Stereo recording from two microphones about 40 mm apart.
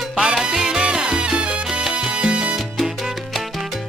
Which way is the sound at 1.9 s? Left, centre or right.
Right.